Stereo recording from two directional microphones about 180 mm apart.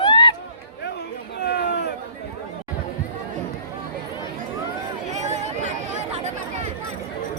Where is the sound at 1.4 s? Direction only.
70° left (ahead or behind).